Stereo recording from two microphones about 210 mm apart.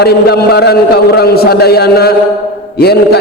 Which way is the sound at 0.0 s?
50° left (ahead or behind).